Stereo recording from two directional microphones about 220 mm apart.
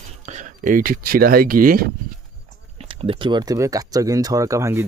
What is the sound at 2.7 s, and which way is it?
Speech, 25° right (ahead or behind).